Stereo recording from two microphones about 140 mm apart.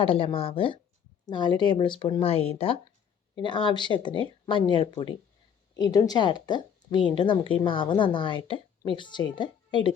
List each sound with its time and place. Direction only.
0.0 s speech: 40° left (ahead or behind)
3.4 s speech: 30° left (ahead or behind)
5.7 s speech: 25° left (ahead or behind)